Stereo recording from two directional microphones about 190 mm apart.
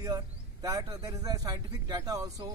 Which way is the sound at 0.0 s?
20° right (ahead or behind).